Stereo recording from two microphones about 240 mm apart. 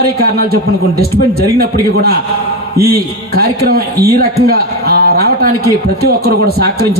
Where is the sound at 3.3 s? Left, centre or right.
Right.